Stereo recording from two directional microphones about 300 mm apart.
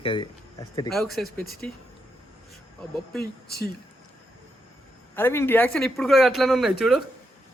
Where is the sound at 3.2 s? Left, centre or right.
Left.